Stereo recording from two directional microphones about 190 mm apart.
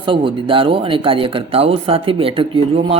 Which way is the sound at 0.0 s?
25° right (ahead or behind).